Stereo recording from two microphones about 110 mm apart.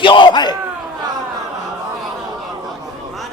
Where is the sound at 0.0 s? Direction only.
45° left (ahead or behind).